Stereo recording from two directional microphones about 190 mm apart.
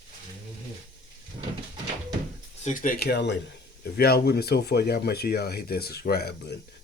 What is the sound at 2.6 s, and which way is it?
Speech, 45° left (ahead or behind).